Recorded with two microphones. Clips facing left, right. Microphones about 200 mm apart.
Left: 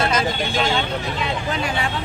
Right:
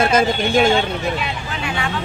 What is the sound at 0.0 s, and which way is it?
Speech, 50° right (ahead or behind).